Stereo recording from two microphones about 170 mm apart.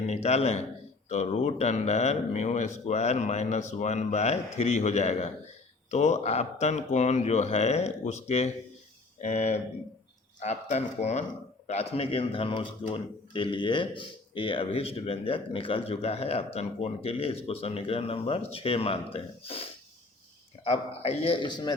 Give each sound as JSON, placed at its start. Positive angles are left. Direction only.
{"t": 0.1, "sound": "speech", "side_deg": 40}
{"t": 20.7, "sound": "speech", "side_deg": 35}